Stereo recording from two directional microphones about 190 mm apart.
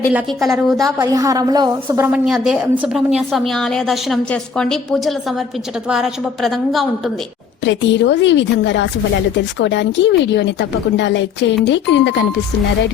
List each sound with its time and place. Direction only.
0.1 s a woman's voice: 5° right (ahead or behind)
0.8 s a woman's voice: 20° right (ahead or behind)
2.1 s a woman's voice: 5° right (ahead or behind)
7.6 s speech: 70° left (ahead or behind)